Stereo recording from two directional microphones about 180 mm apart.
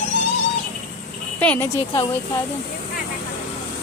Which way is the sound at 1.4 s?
10° left (ahead or behind).